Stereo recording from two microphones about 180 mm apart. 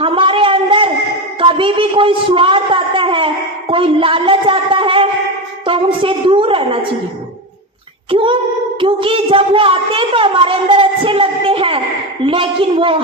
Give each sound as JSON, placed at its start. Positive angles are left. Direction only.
{"t": 0.0, "sound": "a sound", "side_deg": -30}
{"t": 5.6, "sound": "speech", "side_deg": -30}
{"t": 8.1, "sound": "speech", "side_deg": -30}